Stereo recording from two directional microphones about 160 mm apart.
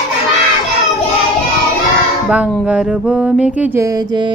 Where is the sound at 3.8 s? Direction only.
20° right (ahead or behind).